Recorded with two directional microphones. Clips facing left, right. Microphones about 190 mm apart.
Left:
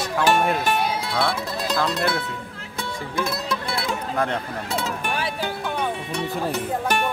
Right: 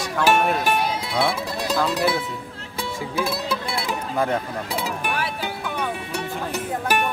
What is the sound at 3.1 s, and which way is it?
Speech, 5° right (ahead or behind).